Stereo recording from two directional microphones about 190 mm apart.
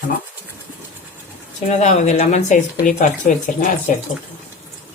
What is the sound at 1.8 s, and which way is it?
Speech, 35° left (ahead or behind).